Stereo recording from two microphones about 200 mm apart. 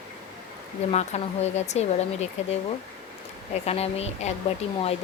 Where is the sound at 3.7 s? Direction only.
30° left (ahead or behind).